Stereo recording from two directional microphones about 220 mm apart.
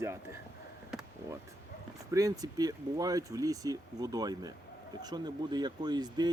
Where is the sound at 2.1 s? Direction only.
15° right (ahead or behind).